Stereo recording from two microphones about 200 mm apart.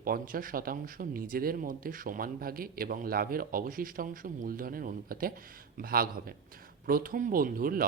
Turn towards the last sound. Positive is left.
turn(degrees=-45)  # may be behind; listen again after turning